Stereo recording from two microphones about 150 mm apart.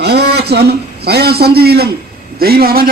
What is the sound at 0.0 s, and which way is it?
A man's voice, 90° right.